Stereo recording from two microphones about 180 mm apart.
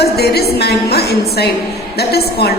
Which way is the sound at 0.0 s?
60° left (ahead or behind).